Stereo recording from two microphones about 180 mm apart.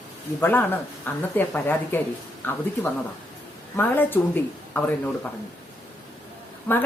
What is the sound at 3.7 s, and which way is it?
Speech, 10° left (ahead or behind).